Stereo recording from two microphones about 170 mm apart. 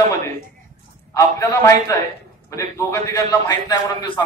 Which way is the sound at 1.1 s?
20° left (ahead or behind).